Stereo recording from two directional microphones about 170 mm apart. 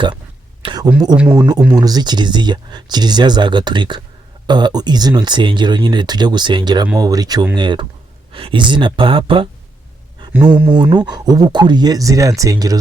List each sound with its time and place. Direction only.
0.6 s a sound: 25° right (ahead or behind)
1.1 s a man's voice: 5° right (ahead or behind)
1.4 s speech: 20° right (ahead or behind)
10.7 s speech: 30° right (ahead or behind)